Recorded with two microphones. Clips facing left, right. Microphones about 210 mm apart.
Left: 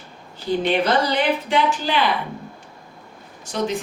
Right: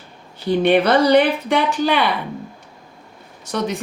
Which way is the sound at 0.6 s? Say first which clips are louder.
Right 6 dB; 60° right (ahead or behind).